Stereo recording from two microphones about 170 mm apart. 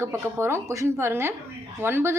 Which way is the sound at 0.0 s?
15° right (ahead or behind).